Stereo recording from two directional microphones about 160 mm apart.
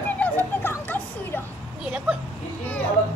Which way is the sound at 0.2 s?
15° left (ahead or behind).